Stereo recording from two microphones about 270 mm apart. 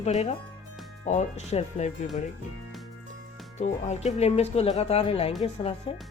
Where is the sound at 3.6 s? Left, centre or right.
Left.